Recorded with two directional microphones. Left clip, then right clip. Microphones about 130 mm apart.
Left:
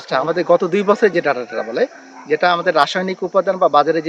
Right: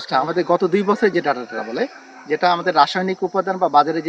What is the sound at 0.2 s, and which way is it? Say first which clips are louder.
Speech: left 3 dB; 50° left (ahead or behind).